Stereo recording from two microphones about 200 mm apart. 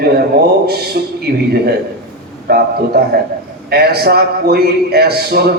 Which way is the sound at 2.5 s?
55° right (ahead or behind).